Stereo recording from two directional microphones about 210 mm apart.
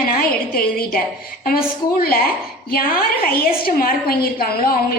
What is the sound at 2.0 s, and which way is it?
A woman's voice, 45° left (ahead or behind).